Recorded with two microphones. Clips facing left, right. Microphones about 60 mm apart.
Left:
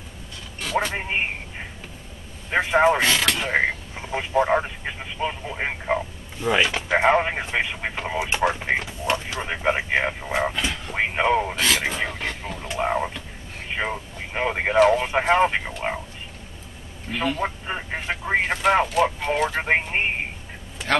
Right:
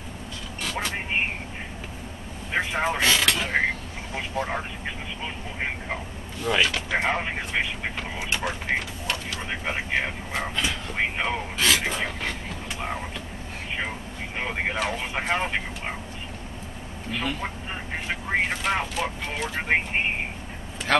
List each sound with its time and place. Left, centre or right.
0.8 s speech: left
2.5 s speech: left
3.0 s speech: centre
4.1 s speech: left
10.5 s speech: centre
11.0 s speech: centre
11.5 s speech: centre
12.7 s a sound: left
13.7 s speech: left
14.8 s speech: centre
15.1 s speech: left
17.1 s speech: centre
17.4 s speech: centre
20.9 s speech: centre